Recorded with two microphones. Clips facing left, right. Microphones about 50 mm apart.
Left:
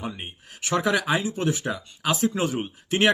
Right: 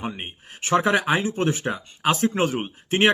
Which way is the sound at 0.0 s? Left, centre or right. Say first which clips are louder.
Right 2 dB; right.